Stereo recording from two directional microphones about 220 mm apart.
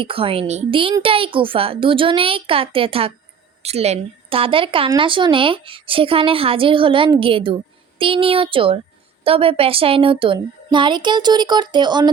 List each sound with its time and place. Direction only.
0.0 s speech: 25° right (ahead or behind)